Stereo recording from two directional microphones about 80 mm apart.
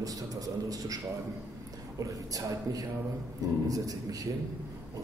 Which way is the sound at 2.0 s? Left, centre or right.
Right.